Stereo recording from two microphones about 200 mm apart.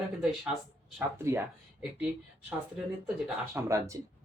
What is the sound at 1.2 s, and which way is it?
Speech, 15° right (ahead or behind).